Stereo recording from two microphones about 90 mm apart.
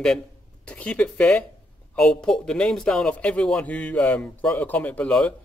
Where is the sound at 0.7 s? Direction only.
15° left (ahead or behind).